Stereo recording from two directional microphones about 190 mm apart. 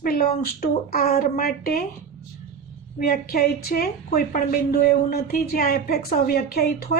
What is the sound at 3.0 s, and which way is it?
A woman's voice, 50° left (ahead or behind).